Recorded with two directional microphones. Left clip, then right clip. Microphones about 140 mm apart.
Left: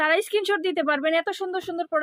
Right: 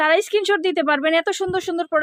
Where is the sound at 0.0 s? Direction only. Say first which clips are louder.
Right 4 dB; 30° right (ahead or behind).